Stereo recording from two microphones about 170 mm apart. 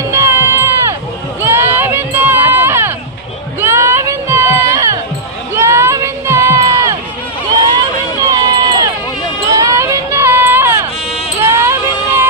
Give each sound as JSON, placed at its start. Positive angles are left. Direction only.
{"t": 0.1, "sound": "crowd", "side_deg": -15}
{"t": 1.4, "sound": "run", "side_deg": -15}
{"t": 3.6, "sound": "music", "side_deg": -15}
{"t": 5.5, "sound": "crowd", "side_deg": -15}
{"t": 8.4, "sound": "run", "side_deg": -20}
{"t": 9.5, "sound": "a sound", "side_deg": -20}